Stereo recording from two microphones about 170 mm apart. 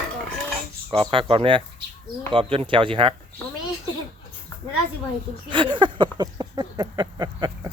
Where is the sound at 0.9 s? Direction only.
30° right (ahead or behind).